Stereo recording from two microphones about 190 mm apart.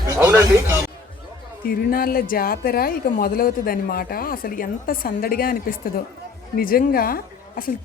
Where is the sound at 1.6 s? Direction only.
50° left (ahead or behind).